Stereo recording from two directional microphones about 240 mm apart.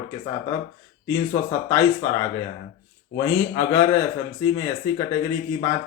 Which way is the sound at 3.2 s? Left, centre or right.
Centre.